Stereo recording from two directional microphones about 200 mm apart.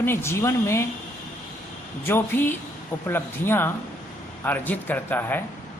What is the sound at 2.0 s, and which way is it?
Speech, 10° left (ahead or behind).